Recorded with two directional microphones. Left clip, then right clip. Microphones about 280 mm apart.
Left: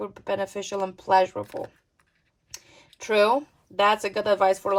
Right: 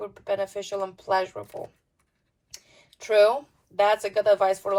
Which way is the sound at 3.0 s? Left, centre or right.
Left.